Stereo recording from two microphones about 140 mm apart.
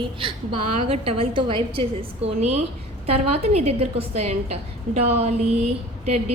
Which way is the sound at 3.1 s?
45° right (ahead or behind).